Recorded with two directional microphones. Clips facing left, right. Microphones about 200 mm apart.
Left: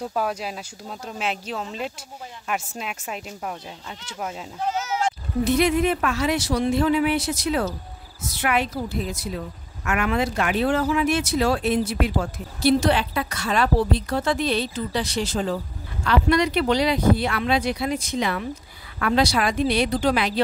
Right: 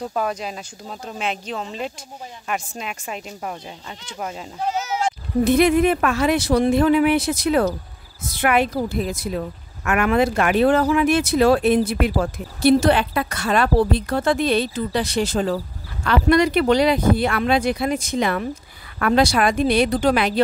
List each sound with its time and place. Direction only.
0.0 s speech: 5° left (ahead or behind)
4.6 s bleat: 15° right (ahead or behind)
5.4 s speech: 55° right (ahead or behind)